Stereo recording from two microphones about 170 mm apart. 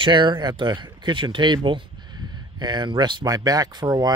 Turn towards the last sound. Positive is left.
turn(degrees=-25)  # may be behind; listen again after turning